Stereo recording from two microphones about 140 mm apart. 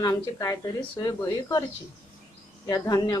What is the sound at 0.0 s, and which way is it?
Speech, 25° left (ahead or behind).